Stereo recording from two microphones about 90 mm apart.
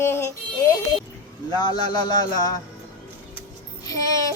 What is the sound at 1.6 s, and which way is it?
Speech, 55° left (ahead or behind).